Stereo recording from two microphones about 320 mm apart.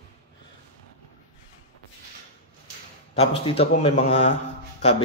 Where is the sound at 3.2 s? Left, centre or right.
Centre.